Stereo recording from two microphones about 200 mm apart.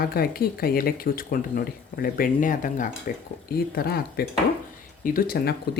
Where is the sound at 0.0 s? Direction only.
50° left (ahead or behind).